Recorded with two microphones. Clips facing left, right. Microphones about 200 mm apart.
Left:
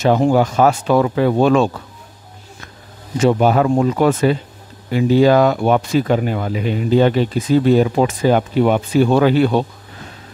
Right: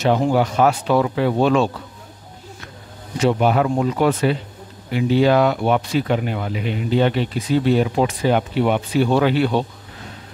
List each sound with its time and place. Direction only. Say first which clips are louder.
0.0 s speech: left 3 dB; 45° left (ahead or behind)
3.2 s speech: left 3 dB; 45° left (ahead or behind)